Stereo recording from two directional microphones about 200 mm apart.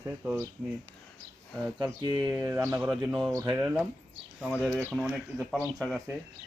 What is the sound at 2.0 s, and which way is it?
Speech, 20° right (ahead or behind).